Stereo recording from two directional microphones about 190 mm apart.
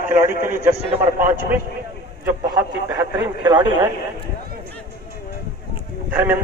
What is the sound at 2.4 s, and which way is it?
Speech, 20° right (ahead or behind).